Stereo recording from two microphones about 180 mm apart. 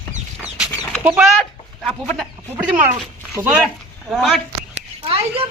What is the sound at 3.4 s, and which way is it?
Speech, 10° right (ahead or behind).